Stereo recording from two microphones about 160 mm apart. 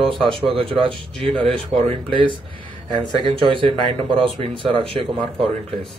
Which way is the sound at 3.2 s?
30° right (ahead or behind).